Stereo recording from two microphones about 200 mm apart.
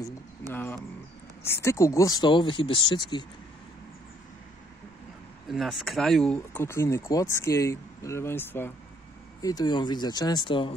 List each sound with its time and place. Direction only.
0.5 s speech: 10° left (ahead or behind)
5.5 s speech: centre (ahead or behind); by 10.7 s 25° left (ahead or behind)